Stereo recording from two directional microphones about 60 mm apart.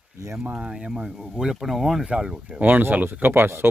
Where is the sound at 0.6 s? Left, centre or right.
Centre.